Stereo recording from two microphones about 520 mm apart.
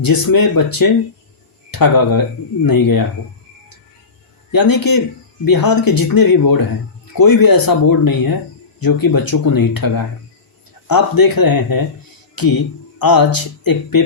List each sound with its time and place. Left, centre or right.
0.0 s speech: left
4.5 s speech: left